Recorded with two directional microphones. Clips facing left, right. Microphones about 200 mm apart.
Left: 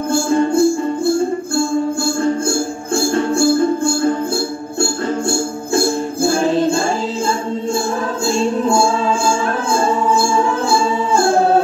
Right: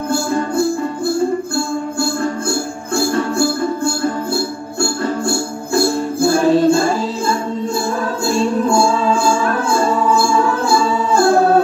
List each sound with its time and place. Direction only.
0.1 s music: 25° left (ahead or behind)
3.2 s music: 25° left (ahead or behind)
5.3 s music: 25° left (ahead or behind)
9.7 s music: 20° left (ahead or behind)